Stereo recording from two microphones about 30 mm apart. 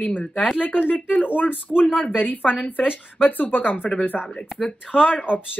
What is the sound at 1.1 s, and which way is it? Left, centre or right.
Speech, left.